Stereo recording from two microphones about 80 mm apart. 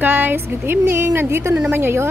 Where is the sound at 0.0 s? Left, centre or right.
Right.